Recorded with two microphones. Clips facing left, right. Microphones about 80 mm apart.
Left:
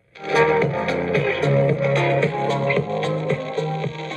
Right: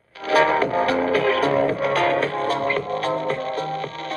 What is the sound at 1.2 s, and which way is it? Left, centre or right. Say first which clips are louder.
Music: left 2 dB; right.